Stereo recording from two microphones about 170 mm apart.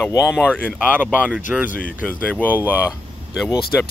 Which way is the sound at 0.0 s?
10° left (ahead or behind).